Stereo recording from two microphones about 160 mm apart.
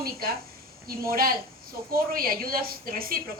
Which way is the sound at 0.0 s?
70° right (ahead or behind).